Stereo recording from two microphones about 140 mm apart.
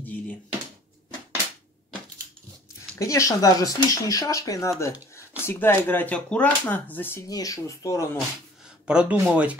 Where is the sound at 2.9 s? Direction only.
25° left (ahead or behind).